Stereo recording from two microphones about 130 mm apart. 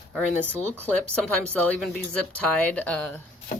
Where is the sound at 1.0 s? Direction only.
10° left (ahead or behind).